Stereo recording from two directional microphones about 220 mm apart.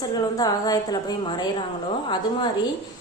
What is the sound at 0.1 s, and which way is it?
A woman's voice, 15° left (ahead or behind).